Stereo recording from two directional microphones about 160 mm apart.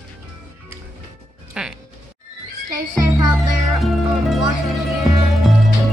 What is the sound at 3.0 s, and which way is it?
Music, 25° right (ahead or behind).